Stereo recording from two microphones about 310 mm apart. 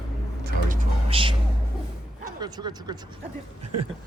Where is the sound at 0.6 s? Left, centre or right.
Centre.